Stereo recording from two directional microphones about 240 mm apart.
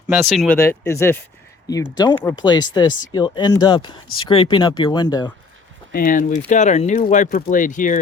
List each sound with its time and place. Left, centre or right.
0.1 s speech: centre
0.6 s speech: centre
5.9 s speech: left